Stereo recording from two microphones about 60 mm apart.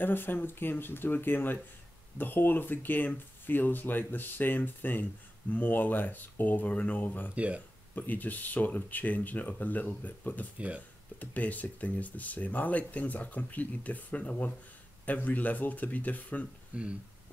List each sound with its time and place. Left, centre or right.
0.0 s speech: left
7.3 s speech: right
7.9 s speech: left
16.7 s speech: right